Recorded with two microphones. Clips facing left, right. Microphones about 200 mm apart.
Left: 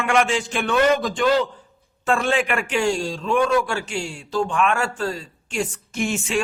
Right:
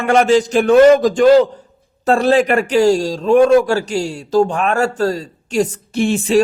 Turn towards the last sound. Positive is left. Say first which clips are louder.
# right 9 dB
turn(degrees=-35)  # may be behind; listen again after turning